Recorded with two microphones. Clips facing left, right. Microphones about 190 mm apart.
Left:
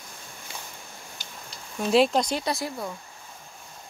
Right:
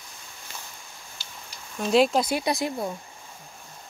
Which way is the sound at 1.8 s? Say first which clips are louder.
Even; centre (ahead or behind).